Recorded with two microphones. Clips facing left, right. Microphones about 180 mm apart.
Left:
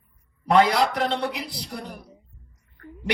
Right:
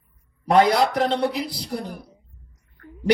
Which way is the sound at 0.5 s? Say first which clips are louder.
Right 2 dB; 40° right (ahead or behind).